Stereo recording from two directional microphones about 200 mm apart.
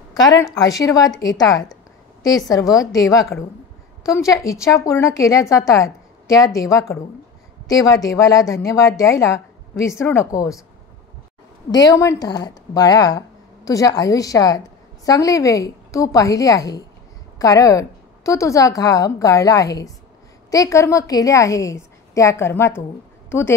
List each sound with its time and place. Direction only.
0.4 s speech: 15° left (ahead or behind)
11.7 s a woman's voice: 20° left (ahead or behind)